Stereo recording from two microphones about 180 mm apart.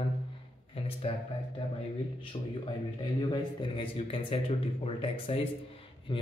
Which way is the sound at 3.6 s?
30° left (ahead or behind).